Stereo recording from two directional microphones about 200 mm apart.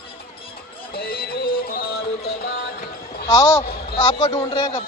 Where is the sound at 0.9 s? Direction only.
50° left (ahead or behind).